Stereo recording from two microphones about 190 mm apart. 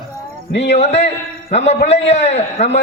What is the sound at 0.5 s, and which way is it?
Speech, 65° left (ahead or behind).